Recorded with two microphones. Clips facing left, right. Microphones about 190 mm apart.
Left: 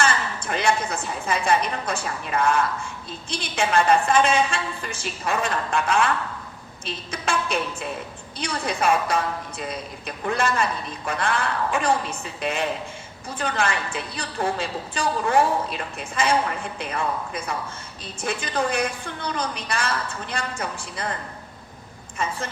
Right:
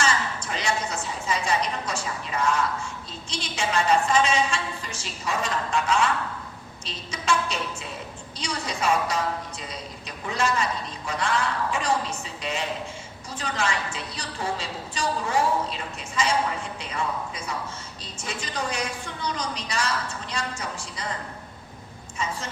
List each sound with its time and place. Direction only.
0.0 s a woman's voice: 55° left (ahead or behind)
22.2 s a woman's voice: 55° left (ahead or behind)